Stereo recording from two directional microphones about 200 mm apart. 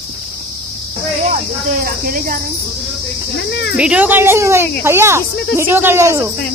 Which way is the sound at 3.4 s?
55° left (ahead or behind).